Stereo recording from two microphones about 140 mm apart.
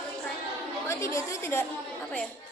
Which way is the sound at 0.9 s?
20° left (ahead or behind).